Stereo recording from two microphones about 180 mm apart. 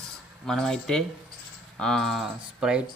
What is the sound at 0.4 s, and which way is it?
Speech, centre (ahead or behind).